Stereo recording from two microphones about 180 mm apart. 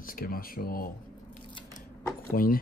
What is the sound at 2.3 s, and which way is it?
Speech, 50° left (ahead or behind).